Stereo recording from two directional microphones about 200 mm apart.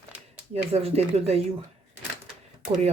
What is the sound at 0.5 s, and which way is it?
Speech, 30° right (ahead or behind).